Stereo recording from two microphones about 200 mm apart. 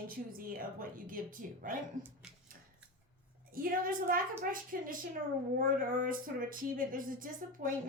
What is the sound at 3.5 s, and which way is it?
Speech, 45° right (ahead or behind).